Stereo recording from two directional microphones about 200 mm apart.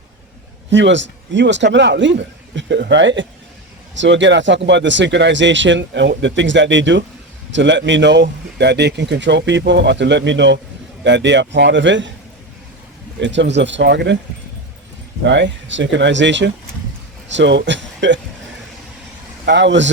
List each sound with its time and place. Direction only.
0.7 s speech: 65° right (ahead or behind)
13.1 s speech: 65° right (ahead or behind)
15.2 s a man's voice: 65° right (ahead or behind)
19.5 s speech: 60° right (ahead or behind)